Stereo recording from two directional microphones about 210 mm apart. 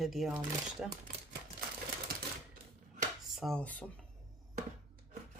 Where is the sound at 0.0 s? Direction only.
Centre (ahead or behind).